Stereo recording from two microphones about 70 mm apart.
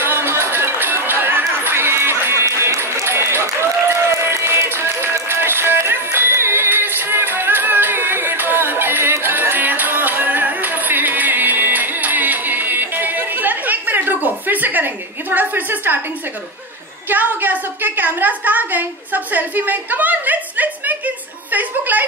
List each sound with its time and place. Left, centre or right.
0.0 s chatter: right
3.9 s run: right
17.1 s a sound: right